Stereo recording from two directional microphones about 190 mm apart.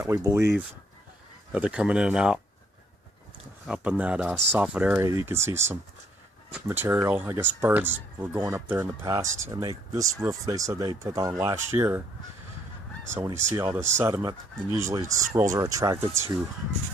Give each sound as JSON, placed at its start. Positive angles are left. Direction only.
{"t": 0.0, "sound": "speech", "side_deg": -15}
{"t": 3.7, "sound": "speech", "side_deg": -5}
{"t": 13.1, "sound": "speech", "side_deg": -15}